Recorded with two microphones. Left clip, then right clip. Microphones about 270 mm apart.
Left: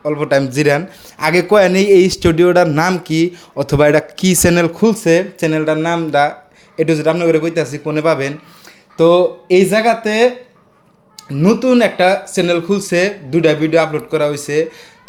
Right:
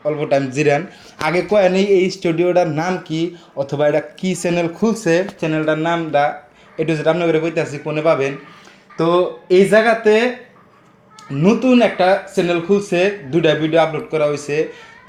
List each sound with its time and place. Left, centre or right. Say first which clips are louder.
0.0 s speech: left 3 dB; left